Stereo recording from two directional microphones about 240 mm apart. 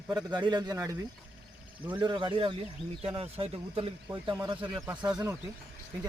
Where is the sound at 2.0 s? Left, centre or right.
Centre.